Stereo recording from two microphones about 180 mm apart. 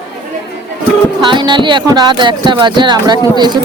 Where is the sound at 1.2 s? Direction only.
25° right (ahead or behind).